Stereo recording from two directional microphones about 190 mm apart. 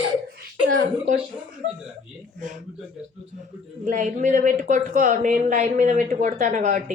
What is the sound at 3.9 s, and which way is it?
Speech, 40° right (ahead or behind).